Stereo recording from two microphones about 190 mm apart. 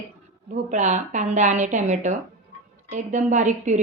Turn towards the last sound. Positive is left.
turn(degrees=-40)  # may be behind; listen again after turning